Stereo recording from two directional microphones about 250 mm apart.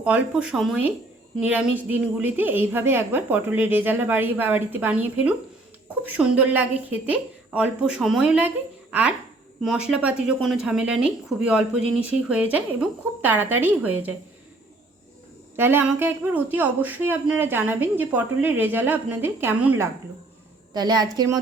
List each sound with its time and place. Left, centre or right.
0.0 s a woman's voice: centre
15.5 s a man's voice: centre